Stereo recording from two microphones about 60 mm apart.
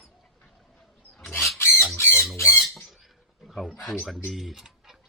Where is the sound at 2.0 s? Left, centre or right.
Left.